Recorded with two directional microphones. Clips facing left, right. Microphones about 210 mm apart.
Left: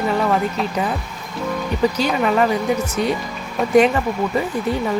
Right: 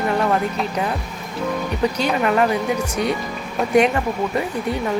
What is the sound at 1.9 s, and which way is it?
Speech, centre (ahead or behind).